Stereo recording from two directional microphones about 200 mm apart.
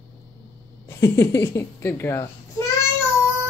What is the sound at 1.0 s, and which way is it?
Speech, 15° left (ahead or behind).